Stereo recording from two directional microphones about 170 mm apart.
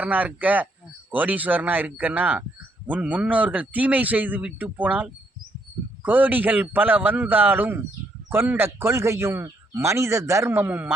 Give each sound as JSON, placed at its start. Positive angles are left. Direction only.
{"t": 0.0, "sound": "a man's voice", "side_deg": -10}